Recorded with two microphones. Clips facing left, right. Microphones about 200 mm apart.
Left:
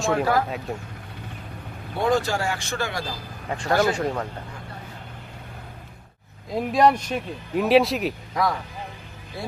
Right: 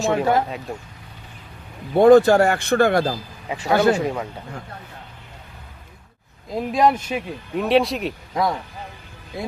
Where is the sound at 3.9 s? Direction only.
5° right (ahead or behind).